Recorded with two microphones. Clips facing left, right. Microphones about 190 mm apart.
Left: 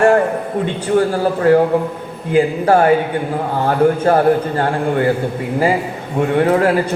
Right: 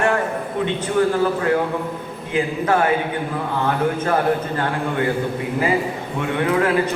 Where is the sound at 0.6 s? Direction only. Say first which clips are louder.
Left 3 dB; 40° left (ahead or behind).